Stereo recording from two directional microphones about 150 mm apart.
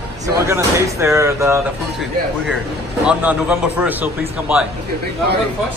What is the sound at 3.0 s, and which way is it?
A man's voice, 10° right (ahead or behind).